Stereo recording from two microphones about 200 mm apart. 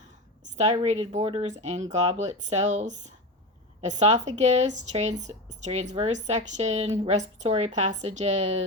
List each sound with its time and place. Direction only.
0.5 s speech: 35° right (ahead or behind)